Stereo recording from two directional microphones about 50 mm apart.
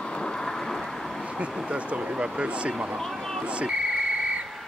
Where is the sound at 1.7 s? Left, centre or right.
Right.